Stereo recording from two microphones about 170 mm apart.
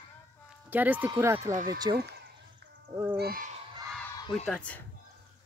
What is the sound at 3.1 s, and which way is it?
Owl, 65° right (ahead or behind).